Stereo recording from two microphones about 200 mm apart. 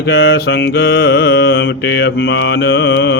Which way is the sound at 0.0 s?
55° left (ahead or behind).